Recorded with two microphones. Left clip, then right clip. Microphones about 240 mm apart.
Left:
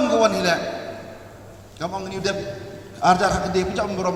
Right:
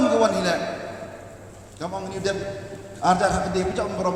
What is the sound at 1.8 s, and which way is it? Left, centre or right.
A man's voice, left.